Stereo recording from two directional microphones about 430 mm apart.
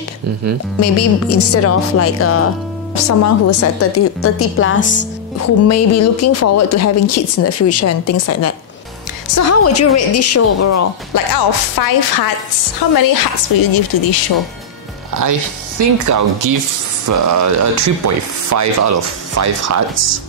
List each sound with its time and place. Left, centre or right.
0.7 s a woman's voice: left
11.3 s a woman's voice: left
15.2 s speech: right